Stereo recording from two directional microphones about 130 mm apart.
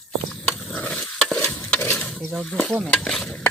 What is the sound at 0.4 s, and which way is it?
Stir, 10° left (ahead or behind).